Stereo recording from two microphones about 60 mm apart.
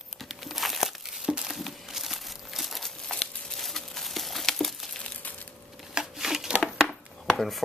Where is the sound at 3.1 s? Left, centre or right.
Centre.